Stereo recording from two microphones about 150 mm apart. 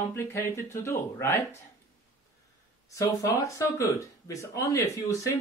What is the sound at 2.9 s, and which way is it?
Speech, 20° left (ahead or behind).